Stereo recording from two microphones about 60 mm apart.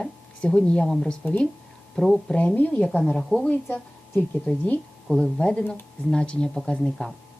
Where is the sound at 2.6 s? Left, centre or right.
Left.